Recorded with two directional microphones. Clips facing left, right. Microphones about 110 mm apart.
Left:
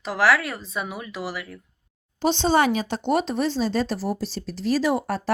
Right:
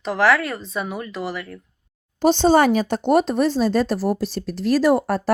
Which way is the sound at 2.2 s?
45° right (ahead or behind).